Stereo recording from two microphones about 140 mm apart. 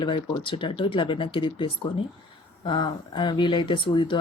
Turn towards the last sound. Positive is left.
turn(degrees=35)  # may be behind; listen again after turning